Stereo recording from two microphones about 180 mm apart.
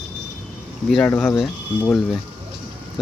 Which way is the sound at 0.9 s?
5° left (ahead or behind).